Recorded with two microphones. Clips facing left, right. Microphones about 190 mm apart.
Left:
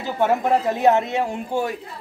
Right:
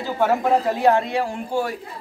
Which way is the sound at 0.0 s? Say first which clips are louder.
Even; 20° left (ahead or behind).